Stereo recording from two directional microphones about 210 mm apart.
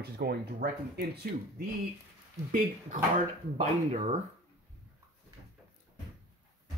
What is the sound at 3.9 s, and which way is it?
Speech, 30° right (ahead or behind).